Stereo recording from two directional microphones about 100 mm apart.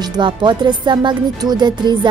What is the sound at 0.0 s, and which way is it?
A woman's voice, 50° right (ahead or behind).